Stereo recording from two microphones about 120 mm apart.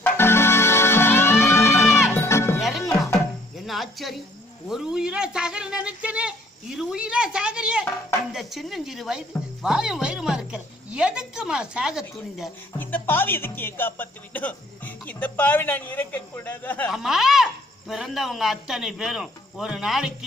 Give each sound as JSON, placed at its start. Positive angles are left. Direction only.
{"t": 0.0, "sound": "music", "side_deg": 20}
{"t": 2.6, "sound": "music", "side_deg": 0}
{"t": 3.7, "sound": "cricket", "side_deg": 0}
{"t": 4.7, "sound": "speech", "side_deg": -5}
{"t": 12.8, "sound": "speech", "side_deg": 15}
{"t": 16.9, "sound": "speech", "side_deg": -5}